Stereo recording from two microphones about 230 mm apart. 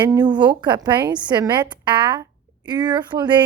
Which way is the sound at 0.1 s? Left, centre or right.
Centre.